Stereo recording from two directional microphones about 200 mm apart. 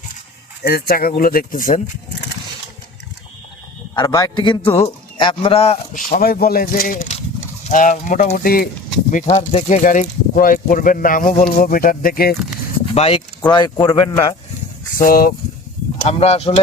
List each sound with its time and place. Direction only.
0.6 s speech: 50° left (ahead or behind)
3.9 s a man's voice: 20° left (ahead or behind); by 8.7 s 45° left (ahead or behind)
9.1 s speech: 35° left (ahead or behind)
12.9 s a man's voice: 30° left (ahead or behind)
14.9 s speech: 45° left (ahead or behind)
16.0 s speech: 30° left (ahead or behind)